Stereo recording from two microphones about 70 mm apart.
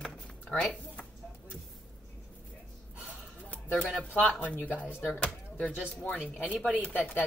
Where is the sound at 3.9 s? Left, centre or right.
Centre.